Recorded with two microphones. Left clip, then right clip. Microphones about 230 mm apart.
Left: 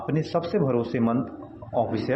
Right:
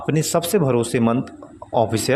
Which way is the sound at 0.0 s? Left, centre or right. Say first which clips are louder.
Right 6 dB; right.